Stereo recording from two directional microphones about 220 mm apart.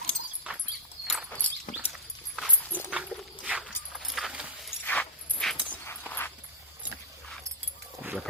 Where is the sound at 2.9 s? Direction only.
5° right (ahead or behind); by 6.0 s 10° left (ahead or behind).